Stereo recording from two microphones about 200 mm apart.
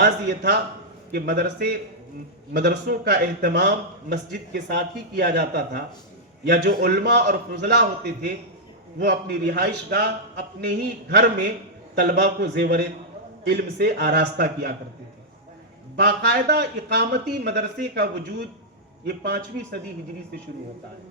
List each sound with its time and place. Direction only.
0.0 s a man's voice: 55° right (ahead or behind)
16.0 s a man's voice: 55° right (ahead or behind)